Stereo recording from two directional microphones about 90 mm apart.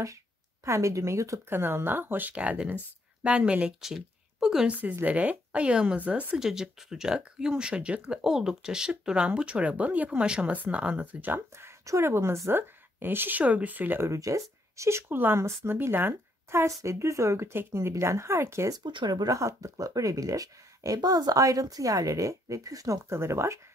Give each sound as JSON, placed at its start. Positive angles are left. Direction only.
{"t": 0.7, "sound": "a woman's voice", "side_deg": -35}
{"t": 5.0, "sound": "speech", "side_deg": -15}
{"t": 6.4, "sound": "speech", "side_deg": -5}
{"t": 18.8, "sound": "speech", "side_deg": -60}